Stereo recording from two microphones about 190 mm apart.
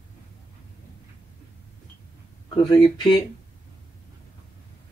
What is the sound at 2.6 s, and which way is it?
Speech, 20° left (ahead or behind).